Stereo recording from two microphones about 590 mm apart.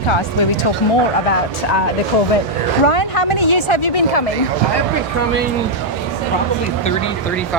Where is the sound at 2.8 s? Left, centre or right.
Left.